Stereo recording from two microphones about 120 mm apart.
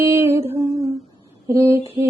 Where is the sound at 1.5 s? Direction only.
25° right (ahead or behind).